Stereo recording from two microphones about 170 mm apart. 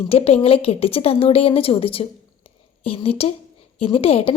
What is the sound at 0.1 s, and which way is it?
A woman's voice, 35° left (ahead or behind).